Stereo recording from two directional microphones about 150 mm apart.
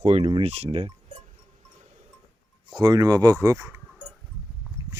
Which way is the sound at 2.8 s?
25° right (ahead or behind).